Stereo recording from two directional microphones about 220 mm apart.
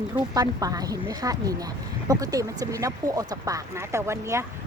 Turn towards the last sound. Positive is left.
turn(degrees=-10)  # may be behind; listen again after turning